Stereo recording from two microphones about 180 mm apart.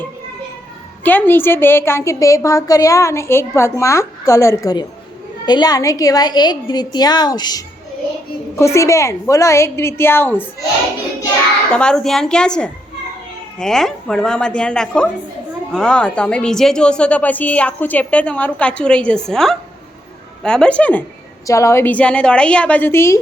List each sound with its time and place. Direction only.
1.0 s a woman's voice: 10° left (ahead or behind)
11.7 s a woman's voice: 5° left (ahead or behind)